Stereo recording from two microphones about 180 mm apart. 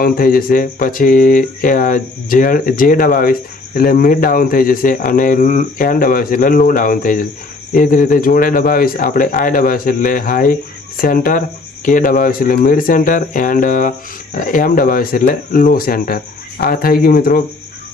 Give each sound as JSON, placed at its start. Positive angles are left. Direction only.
{"t": 0.0, "sound": "speech", "side_deg": 55}